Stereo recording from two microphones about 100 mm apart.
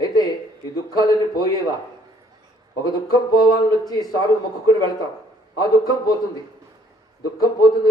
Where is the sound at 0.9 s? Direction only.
40° left (ahead or behind).